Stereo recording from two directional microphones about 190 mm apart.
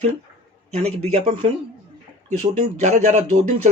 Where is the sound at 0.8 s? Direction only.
35° right (ahead or behind).